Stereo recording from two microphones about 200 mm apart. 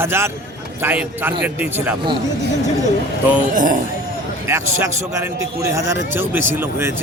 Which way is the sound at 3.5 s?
40° right (ahead or behind).